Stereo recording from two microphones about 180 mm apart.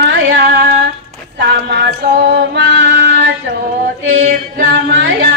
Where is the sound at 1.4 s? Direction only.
70° right (ahead or behind).